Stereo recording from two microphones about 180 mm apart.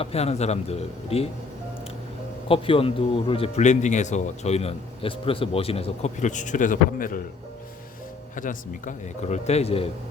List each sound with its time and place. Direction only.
0.0 s speech: 35° left (ahead or behind)
2.5 s speech: 30° left (ahead or behind); by 7.2 s 50° left (ahead or behind)
8.4 s speech: 45° left (ahead or behind)